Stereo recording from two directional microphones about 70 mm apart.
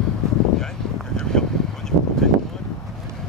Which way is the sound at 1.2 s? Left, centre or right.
Centre.